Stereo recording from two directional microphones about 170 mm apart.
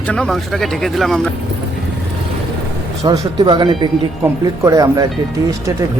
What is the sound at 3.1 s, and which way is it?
Speech, 25° right (ahead or behind).